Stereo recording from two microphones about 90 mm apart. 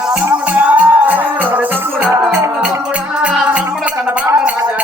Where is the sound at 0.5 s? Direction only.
20° right (ahead or behind).